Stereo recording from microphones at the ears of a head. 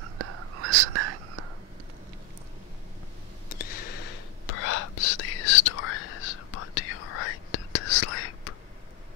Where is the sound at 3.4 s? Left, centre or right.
Left.